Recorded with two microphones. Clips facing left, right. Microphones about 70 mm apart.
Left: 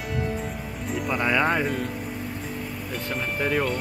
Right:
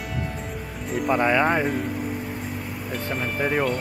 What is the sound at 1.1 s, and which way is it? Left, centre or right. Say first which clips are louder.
Speech: right 3 dB; centre.